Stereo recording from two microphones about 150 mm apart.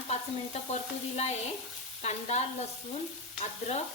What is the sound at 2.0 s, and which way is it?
Speech, 50° left (ahead or behind).